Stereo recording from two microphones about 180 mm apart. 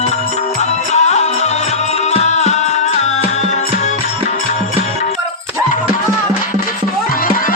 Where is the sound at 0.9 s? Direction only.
40° left (ahead or behind).